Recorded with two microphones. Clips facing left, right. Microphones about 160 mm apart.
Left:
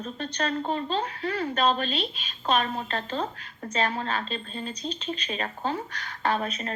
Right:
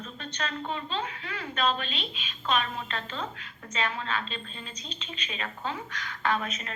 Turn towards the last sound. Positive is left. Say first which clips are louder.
# left 3 dB
turn(degrees=35)  # may be behind; listen again after turning